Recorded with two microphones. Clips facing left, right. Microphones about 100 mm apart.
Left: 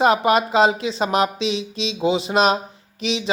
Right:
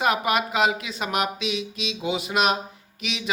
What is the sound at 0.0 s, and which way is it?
Speech, 30° left (ahead or behind).